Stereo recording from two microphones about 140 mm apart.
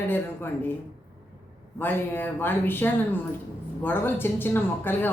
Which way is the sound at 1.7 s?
15° left (ahead or behind).